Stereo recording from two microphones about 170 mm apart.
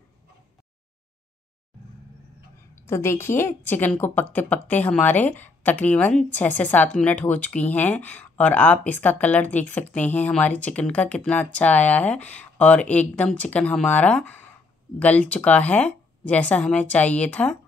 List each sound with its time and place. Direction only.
2.9 s a woman's voice: 15° left (ahead or behind)